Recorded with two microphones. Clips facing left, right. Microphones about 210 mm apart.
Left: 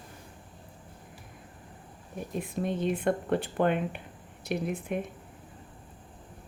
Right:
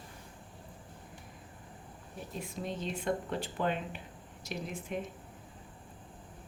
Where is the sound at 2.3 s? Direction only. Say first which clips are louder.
Left 7 dB; 55° left (ahead or behind).